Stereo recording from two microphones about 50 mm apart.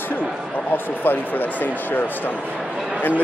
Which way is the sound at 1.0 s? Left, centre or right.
Left.